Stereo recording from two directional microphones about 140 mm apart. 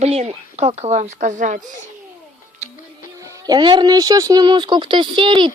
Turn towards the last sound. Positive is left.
turn(degrees=-35)  # may be behind; listen again after turning